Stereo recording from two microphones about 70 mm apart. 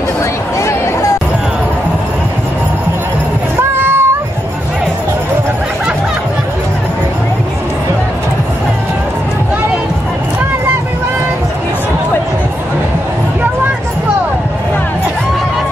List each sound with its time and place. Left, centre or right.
3.7 s cat: right